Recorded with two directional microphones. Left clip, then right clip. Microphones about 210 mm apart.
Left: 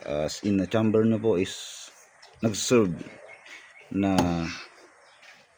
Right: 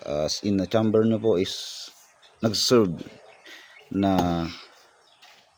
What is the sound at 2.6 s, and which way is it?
Speech, 20° right (ahead or behind).